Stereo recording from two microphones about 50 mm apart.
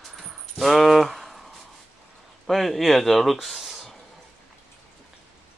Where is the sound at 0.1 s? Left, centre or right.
Centre.